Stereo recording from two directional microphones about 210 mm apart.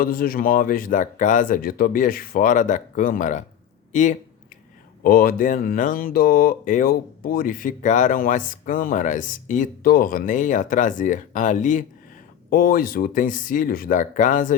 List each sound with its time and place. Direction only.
0.0 s speech: 45° left (ahead or behind)
5.0 s speech: 45° left (ahead or behind)